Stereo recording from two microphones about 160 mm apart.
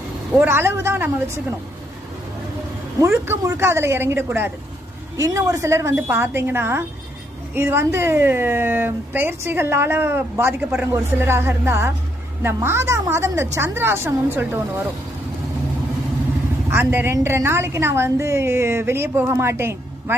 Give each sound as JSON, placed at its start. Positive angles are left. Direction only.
{"t": 0.3, "sound": "a woman's voice", "side_deg": -10}
{"t": 3.0, "sound": "a woman's voice", "side_deg": -15}
{"t": 16.7, "sound": "a woman's voice", "side_deg": -15}